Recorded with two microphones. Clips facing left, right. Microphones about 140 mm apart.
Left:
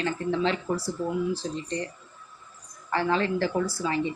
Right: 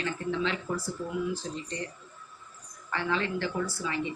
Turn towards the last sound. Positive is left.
turn(degrees=35)  # may be behind; listen again after turning